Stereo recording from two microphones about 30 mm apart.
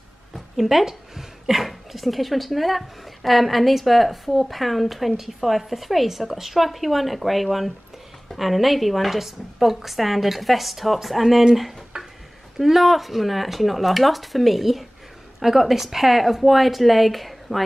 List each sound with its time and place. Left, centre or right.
0.6 s speech: centre
11.9 s a sound: right
12.5 s speech: centre